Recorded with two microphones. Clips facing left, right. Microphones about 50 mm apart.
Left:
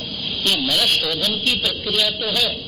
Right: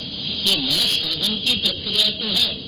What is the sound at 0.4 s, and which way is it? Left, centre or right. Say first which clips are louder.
Speech: left 3 dB; left.